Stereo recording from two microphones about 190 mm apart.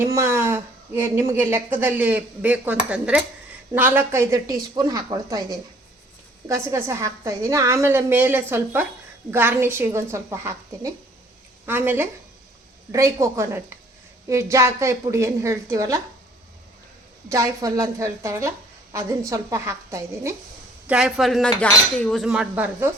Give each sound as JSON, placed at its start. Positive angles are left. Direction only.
{"t": 0.0, "sound": "a woman's voice", "side_deg": -15}
{"t": 17.2, "sound": "a woman's voice", "side_deg": -15}
{"t": 20.8, "sound": "cutlery", "side_deg": -5}